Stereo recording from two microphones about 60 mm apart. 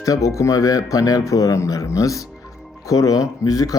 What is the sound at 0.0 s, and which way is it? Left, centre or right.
Speech, left.